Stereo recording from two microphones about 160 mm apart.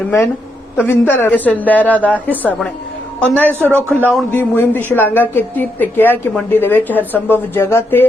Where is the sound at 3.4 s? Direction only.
15° right (ahead or behind).